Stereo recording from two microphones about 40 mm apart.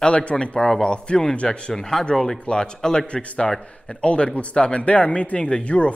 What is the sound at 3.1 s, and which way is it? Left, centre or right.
A man's voice, left.